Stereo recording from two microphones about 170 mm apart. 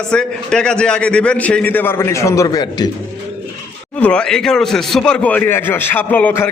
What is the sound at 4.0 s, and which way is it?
Speech, 5° left (ahead or behind).